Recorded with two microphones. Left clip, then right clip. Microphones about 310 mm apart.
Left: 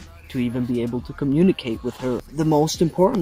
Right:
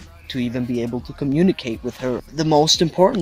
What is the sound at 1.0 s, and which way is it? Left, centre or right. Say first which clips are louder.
Speech: even; right.